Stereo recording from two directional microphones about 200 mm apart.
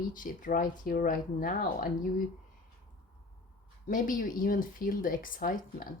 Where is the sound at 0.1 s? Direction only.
40° left (ahead or behind).